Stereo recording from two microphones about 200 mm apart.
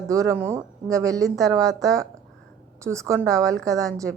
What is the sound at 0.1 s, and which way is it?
A woman's voice, 15° right (ahead or behind).